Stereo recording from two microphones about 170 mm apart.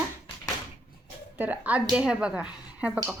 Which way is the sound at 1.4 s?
10° right (ahead or behind).